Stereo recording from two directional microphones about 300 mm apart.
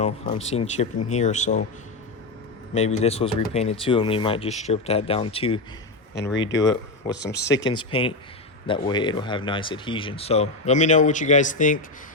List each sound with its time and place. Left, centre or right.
0.0 s speech: left
2.7 s speech: left
6.3 s speech: left
7.7 s speech: centre